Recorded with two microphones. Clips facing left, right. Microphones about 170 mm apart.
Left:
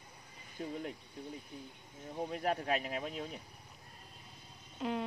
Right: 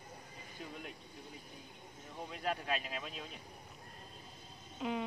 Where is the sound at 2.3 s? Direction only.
35° left (ahead or behind).